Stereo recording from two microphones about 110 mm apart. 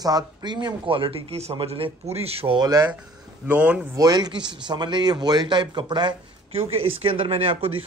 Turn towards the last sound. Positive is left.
turn(degrees=-55)  # may be behind; listen again after turning